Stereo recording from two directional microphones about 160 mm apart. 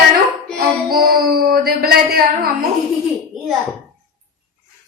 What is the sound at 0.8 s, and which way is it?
Music, 70° right (ahead or behind).